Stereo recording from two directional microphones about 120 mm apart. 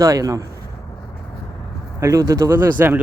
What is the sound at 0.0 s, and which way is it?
Speech, 30° right (ahead or behind).